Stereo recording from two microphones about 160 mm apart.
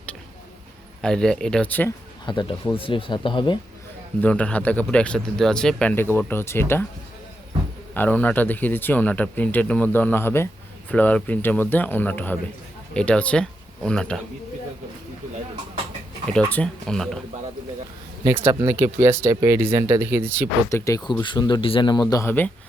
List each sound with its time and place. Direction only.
1.0 s speech: 5° left (ahead or behind)
2.2 s speech: 30° left (ahead or behind)
4.2 s speech: 10° left (ahead or behind)
7.9 s speech: 10° left (ahead or behind)
16.2 s speech: 5° left (ahead or behind)
18.3 s speech: 15° right (ahead or behind)
20.7 s speech: 20° left (ahead or behind)
22.1 s speech: 15° left (ahead or behind)